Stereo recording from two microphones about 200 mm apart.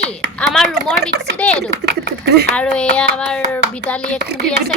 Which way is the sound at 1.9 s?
55° right (ahead or behind).